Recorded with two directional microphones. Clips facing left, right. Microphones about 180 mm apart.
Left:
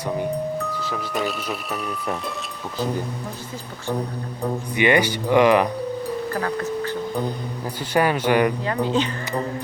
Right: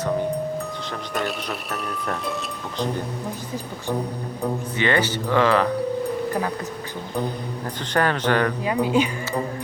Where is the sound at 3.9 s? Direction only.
Centre (ahead or behind).